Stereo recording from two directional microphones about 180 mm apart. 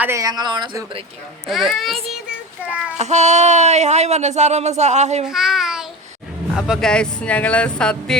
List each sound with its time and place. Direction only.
0.0 s speech: 15° right (ahead or behind)
1.5 s speech: centre (ahead or behind)
3.0 s speech: 40° right (ahead or behind)
5.2 s a child's voice: 5° right (ahead or behind)